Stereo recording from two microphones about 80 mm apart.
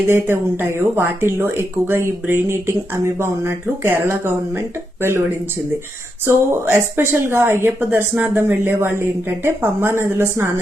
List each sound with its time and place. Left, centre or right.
0.1 s speech: right
6.2 s a woman's voice: right